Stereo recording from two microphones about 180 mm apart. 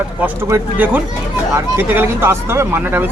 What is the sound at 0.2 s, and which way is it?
Speech, 10° right (ahead or behind).